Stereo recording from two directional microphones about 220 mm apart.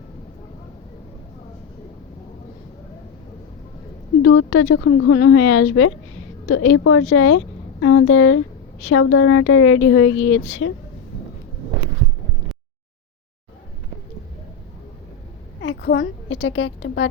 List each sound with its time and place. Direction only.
4.2 s a woman's voice: 70° left (ahead or behind)
15.6 s a woman's voice: 55° left (ahead or behind)